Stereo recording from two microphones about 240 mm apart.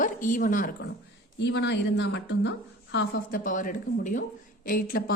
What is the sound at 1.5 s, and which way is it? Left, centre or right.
A woman's voice, left.